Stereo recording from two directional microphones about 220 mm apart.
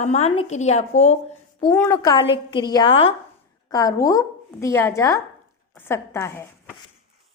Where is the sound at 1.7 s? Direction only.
10° left (ahead or behind).